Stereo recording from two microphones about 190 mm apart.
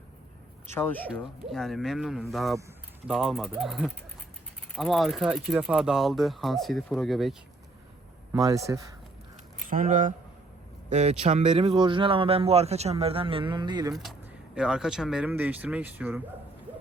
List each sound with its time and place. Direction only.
0.7 s speech: 10° left (ahead or behind)
8.3 s a man's voice: 15° right (ahead or behind)
9.6 s speech: 45° right (ahead or behind); by 13.9 s 20° right (ahead or behind)
13.9 s speech: centre (ahead or behind)